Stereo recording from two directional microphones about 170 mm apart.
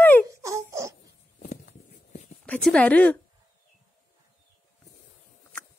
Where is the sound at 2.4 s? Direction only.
5° left (ahead or behind).